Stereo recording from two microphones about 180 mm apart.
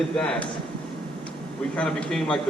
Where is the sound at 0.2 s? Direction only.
5° left (ahead or behind).